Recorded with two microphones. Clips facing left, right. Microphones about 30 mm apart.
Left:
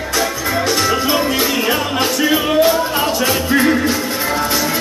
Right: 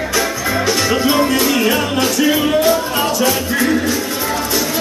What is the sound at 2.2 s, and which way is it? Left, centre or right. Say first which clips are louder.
Music: left 1 dB; centre.